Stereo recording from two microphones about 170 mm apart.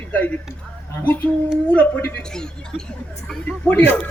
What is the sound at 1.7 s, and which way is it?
A man's voice, 10° left (ahead or behind).